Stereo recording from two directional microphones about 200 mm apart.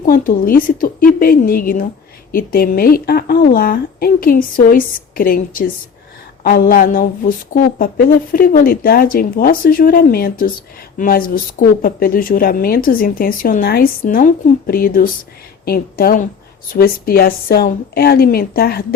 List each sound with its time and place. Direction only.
0.0 s a woman's voice: 45° left (ahead or behind)